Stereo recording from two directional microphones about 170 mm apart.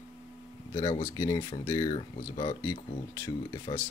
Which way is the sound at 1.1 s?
25° left (ahead or behind).